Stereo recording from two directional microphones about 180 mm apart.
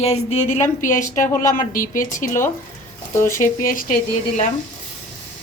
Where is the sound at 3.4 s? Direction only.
50° left (ahead or behind).